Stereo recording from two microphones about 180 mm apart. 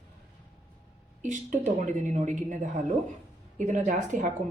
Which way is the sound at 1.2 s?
45° right (ahead or behind).